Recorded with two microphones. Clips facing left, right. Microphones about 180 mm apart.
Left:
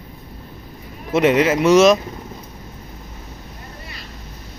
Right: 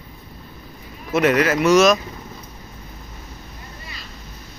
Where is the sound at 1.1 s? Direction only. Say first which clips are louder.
Left 2 dB; 25° left (ahead or behind).